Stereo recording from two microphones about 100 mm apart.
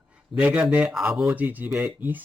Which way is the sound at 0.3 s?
10° right (ahead or behind).